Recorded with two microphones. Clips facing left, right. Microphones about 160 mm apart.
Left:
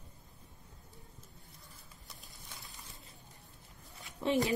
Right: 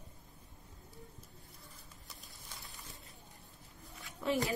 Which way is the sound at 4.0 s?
20° left (ahead or behind).